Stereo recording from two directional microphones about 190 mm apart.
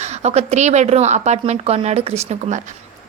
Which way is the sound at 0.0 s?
35° right (ahead or behind).